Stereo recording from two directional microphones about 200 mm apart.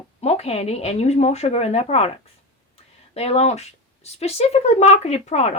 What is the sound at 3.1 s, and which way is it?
Speech, 30° left (ahead or behind).